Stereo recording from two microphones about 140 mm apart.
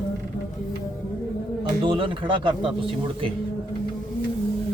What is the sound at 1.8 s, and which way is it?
Speech, 35° right (ahead or behind).